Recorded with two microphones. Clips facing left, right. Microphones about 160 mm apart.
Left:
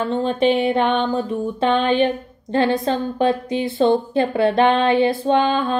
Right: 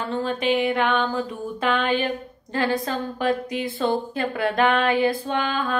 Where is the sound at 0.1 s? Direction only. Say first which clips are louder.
Left 4 dB; 30° left (ahead or behind).